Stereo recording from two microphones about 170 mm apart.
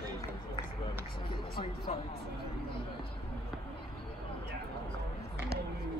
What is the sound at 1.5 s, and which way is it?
Music, 30° left (ahead or behind).